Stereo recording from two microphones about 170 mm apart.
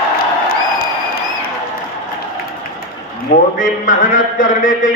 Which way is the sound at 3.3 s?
55° left (ahead or behind).